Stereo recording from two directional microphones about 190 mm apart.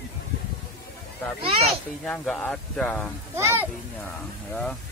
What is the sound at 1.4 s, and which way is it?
Speech, 30° right (ahead or behind).